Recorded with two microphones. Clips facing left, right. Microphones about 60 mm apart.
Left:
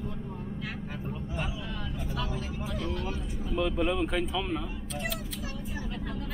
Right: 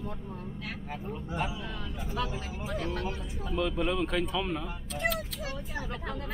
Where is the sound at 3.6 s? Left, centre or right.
Centre.